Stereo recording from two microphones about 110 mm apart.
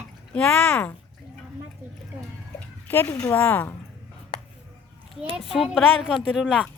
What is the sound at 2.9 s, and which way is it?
Speech, 20° left (ahead or behind).